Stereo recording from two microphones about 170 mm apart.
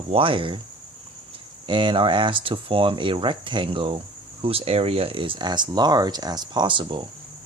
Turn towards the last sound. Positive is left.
turn(degrees=-30)  # may be behind; listen again after turning